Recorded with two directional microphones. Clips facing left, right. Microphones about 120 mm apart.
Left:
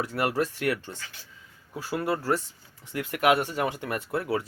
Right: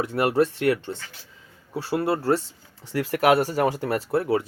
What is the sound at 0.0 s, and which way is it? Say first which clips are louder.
Speech: right 6 dB; 25° right (ahead or behind).